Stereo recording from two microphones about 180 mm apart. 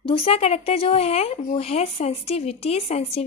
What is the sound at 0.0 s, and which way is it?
Speech, 30° left (ahead or behind).